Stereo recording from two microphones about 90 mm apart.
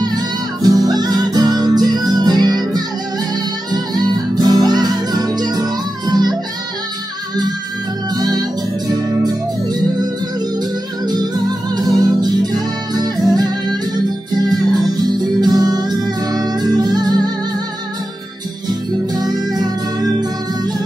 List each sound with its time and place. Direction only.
0.0 s music: 50° right (ahead or behind)
8.1 s music: 50° right (ahead or behind)
10.6 s music: 50° right (ahead or behind)
15.4 s music: 45° right (ahead or behind)
19.1 s music: 50° right (ahead or behind)